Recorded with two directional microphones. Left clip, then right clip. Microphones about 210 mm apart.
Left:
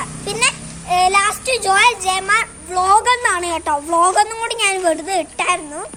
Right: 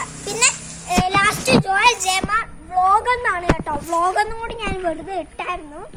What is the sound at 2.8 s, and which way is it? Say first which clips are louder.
Speech: left 4 dB; 15° left (ahead or behind).